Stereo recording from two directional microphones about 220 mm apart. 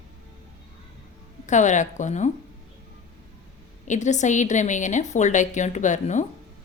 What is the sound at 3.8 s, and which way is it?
A woman's voice, 35° left (ahead or behind).